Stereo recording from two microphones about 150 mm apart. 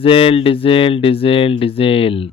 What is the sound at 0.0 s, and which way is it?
Speech, 40° left (ahead or behind).